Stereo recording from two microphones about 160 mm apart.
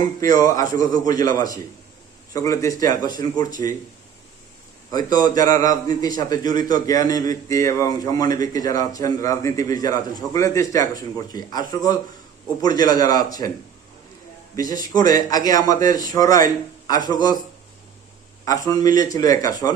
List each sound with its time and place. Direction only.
0.2 s a man's voice: 20° left (ahead or behind)
4.9 s a man's voice: 25° left (ahead or behind)
14.7 s a man's voice: 25° left (ahead or behind)
18.4 s a man's voice: 20° left (ahead or behind)